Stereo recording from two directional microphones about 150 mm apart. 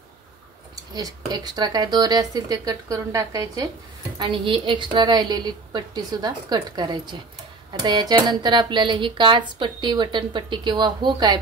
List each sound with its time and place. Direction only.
0.9 s a woman's voice: 25° right (ahead or behind)
4.2 s a woman's voice: 35° right (ahead or behind)